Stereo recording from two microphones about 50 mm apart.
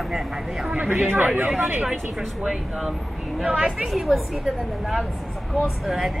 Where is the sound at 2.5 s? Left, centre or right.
Centre.